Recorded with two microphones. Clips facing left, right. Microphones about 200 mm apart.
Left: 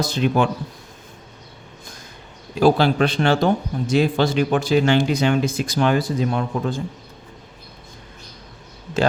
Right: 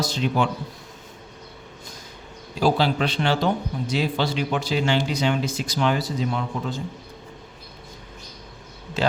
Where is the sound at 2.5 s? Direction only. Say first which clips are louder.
Left 5 dB; 55° left (ahead or behind).